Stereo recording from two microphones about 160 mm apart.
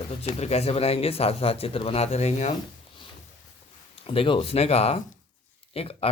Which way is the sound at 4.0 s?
35° left (ahead or behind).